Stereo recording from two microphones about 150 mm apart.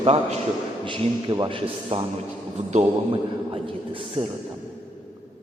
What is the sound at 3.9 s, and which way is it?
Speech, 35° right (ahead or behind).